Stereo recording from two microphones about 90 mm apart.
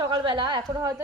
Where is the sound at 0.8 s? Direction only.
35° right (ahead or behind).